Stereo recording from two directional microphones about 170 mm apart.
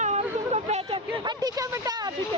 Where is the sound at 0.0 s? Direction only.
40° right (ahead or behind).